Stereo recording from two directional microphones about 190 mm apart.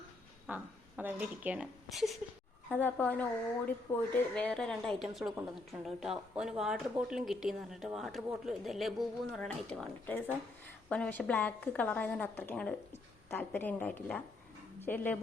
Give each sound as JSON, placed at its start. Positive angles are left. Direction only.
{"t": 0.4, "sound": "a woman's voice", "side_deg": -10}